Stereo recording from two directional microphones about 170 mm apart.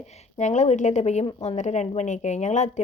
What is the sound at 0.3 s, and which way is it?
Speech, 45° left (ahead or behind).